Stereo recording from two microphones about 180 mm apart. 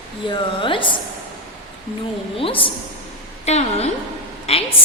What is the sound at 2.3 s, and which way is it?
A woman's voice, 30° left (ahead or behind).